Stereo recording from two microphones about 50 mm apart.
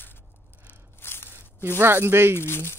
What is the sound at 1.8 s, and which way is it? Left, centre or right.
Speech, right.